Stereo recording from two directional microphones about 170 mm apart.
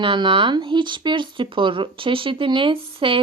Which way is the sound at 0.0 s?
30° right (ahead or behind).